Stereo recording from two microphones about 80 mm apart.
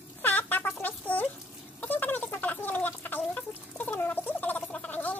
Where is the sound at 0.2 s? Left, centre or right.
Left.